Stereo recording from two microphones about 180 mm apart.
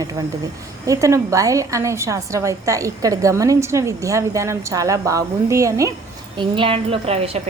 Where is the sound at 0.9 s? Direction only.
15° right (ahead or behind).